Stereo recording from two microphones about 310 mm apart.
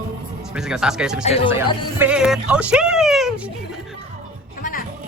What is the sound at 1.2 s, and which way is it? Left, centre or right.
Speech, centre.